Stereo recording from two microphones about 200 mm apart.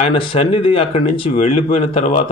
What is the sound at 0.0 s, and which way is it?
Speech, 25° left (ahead or behind).